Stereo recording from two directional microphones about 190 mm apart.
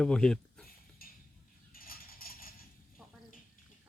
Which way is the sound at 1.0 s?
50° left (ahead or behind).